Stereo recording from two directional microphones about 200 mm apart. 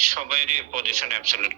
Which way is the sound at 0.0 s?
40° right (ahead or behind).